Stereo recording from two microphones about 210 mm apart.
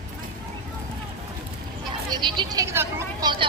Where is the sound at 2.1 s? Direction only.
20° right (ahead or behind).